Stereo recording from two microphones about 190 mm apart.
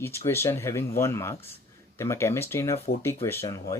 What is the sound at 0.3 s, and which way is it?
Speech, 15° left (ahead or behind).